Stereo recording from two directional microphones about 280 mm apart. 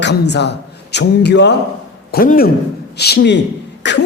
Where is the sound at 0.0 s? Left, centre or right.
Left.